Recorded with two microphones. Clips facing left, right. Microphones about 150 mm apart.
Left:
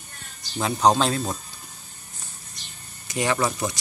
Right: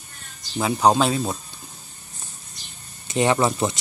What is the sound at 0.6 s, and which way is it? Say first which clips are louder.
Speech: right 2 dB; 10° right (ahead or behind).